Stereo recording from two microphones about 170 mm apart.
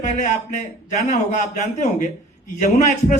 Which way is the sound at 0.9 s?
45° left (ahead or behind).